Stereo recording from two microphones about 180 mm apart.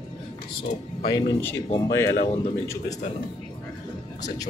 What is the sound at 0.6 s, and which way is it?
Speech, 20° left (ahead or behind).